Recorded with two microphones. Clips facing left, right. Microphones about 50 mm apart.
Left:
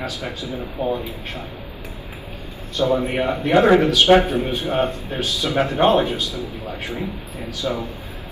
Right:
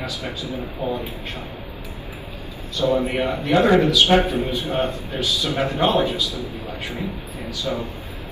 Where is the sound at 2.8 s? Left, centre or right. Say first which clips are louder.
Left 1 dB; left.